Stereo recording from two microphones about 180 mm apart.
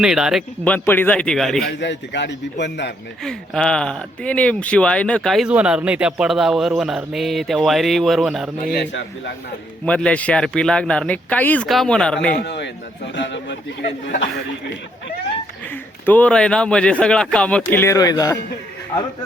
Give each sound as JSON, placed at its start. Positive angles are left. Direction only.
{"t": 0.0, "sound": "speech", "side_deg": -5}
{"t": 0.6, "sound": "a man's voice", "side_deg": 10}
{"t": 1.6, "sound": "a man's voice", "side_deg": 75}
{"t": 3.2, "sound": "speech", "side_deg": 5}
{"t": 8.7, "sound": "a man's voice", "side_deg": 70}
{"t": 9.8, "sound": "speech", "side_deg": 5}
{"t": 12.3, "sound": "a man's voice", "side_deg": 65}
{"t": 13.1, "sound": "a man's voice", "side_deg": 80}
{"t": 15.7, "sound": "a man's voice", "side_deg": 10}